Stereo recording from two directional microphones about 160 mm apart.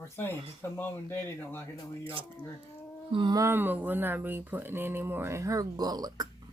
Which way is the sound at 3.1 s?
30° right (ahead or behind).